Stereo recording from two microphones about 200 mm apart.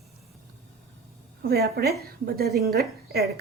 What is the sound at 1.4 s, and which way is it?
A woman's voice, 50° right (ahead or behind).